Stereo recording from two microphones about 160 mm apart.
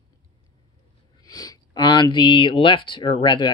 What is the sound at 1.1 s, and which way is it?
Speech, 25° left (ahead or behind).